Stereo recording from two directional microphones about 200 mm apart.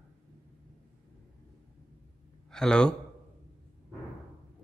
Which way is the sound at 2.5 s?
5° left (ahead or behind).